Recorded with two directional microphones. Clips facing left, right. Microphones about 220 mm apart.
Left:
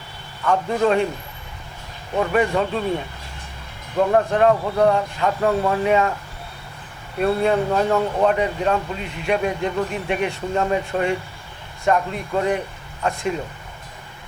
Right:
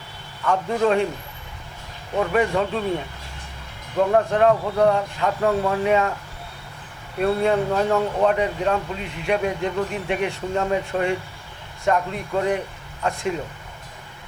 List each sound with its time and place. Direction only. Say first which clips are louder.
0.4 s speech: left 1 dB; 25° left (ahead or behind)
2.1 s speech: left 1 dB; 20° left (ahead or behind)
3.9 s speech: left 1 dB; 25° left (ahead or behind)
7.2 s speech: left 1 dB; 20° left (ahead or behind)